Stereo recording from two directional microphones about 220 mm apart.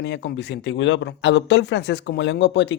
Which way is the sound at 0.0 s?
50° left (ahead or behind).